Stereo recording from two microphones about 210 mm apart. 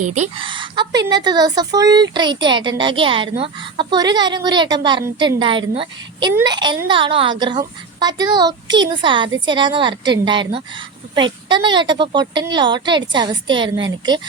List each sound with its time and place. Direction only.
0.0 s speech: 35° right (ahead or behind)